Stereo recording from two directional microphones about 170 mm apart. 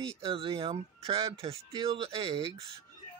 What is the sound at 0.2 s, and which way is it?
Speech, 35° right (ahead or behind).